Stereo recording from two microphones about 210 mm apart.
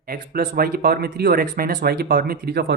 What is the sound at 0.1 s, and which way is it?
Speech, 45° right (ahead or behind).